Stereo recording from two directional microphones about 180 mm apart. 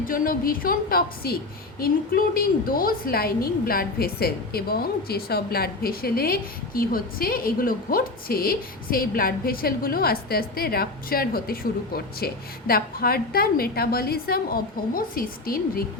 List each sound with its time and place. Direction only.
0.0 s a woman's voice: 50° left (ahead or behind)